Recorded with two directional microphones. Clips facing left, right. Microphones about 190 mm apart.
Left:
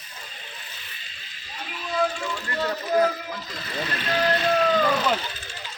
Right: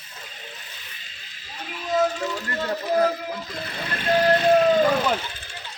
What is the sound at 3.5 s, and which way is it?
Speech, 50° right (ahead or behind).